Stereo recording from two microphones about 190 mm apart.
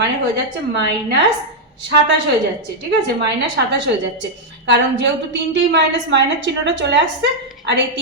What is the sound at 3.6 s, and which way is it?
A woman's voice, 60° right (ahead or behind).